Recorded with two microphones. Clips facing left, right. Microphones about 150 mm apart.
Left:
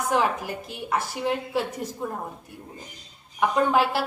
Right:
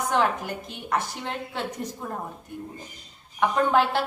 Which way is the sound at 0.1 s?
5° left (ahead or behind).